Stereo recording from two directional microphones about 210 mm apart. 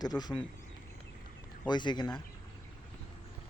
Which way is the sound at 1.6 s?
20° left (ahead or behind).